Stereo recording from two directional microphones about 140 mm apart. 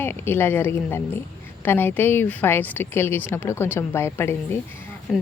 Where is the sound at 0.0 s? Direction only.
15° left (ahead or behind).